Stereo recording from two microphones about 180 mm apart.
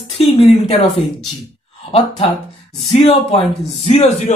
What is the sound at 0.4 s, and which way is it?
Speech, 35° left (ahead or behind).